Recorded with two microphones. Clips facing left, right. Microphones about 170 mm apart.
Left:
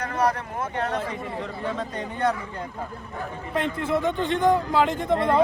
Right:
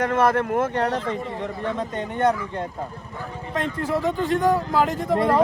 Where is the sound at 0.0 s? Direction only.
85° right.